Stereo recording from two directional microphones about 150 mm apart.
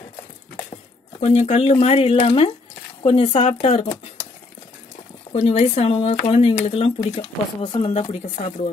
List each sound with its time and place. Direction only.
1.2 s speech: 45° left (ahead or behind)
3.6 s speech: 50° left (ahead or behind)
5.3 s speech: 45° left (ahead or behind)
6.7 s speech: 35° left (ahead or behind)
7.9 s speech: 45° left (ahead or behind)